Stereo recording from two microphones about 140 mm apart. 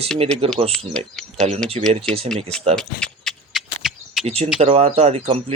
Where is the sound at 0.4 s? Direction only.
45° right (ahead or behind).